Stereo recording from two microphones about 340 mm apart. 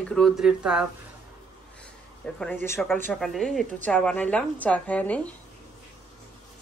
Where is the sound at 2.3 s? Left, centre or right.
Centre.